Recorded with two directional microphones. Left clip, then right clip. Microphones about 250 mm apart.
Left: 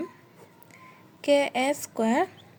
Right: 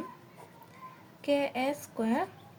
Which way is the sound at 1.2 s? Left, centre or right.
Left.